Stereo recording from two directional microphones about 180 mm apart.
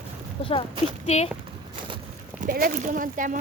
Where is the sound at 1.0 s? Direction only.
35° left (ahead or behind).